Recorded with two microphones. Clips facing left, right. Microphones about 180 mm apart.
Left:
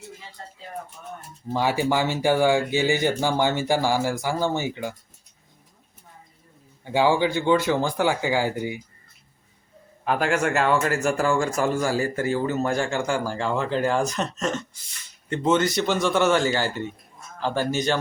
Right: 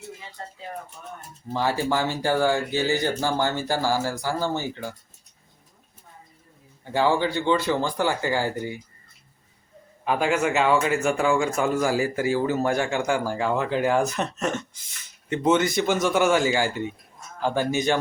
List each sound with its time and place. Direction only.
1.5 s speech: 15° left (ahead or behind)
6.8 s speech: 10° left (ahead or behind)
10.0 s speech: centre (ahead or behind)
11.8 s speech: 10° right (ahead or behind)